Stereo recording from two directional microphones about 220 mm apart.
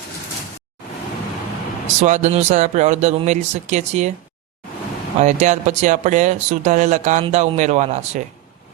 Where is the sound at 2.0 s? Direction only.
30° right (ahead or behind).